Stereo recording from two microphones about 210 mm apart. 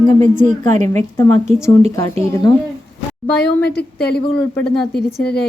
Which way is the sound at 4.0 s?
50° left (ahead or behind).